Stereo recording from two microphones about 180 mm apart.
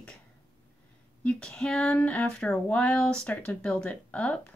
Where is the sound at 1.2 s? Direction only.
5° left (ahead or behind).